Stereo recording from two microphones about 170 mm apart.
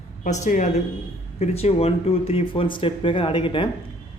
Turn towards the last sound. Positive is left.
turn(degrees=30)  # may be behind; listen again after turning